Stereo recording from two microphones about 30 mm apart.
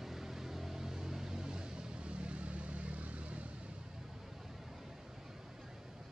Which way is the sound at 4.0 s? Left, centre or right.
Centre.